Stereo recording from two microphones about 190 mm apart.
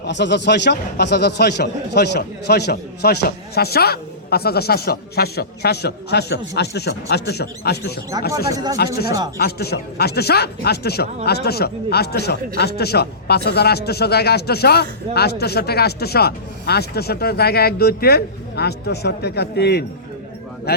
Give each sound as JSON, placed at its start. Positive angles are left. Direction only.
{"t": 0.0, "sound": "a man's voice", "side_deg": 65}
{"t": 8.4, "sound": "speech", "side_deg": -20}
{"t": 9.4, "sound": "a man's voice", "side_deg": 55}